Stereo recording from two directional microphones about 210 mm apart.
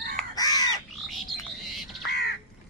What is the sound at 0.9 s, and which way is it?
Wild animals, centre (ahead or behind).